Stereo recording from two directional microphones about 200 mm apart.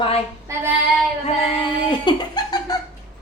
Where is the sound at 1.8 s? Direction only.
20° left (ahead or behind).